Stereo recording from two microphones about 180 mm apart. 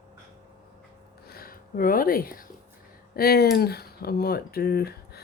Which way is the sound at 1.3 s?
55° left (ahead or behind).